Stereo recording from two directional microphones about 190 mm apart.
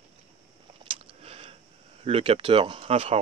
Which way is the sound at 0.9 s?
30° right (ahead or behind).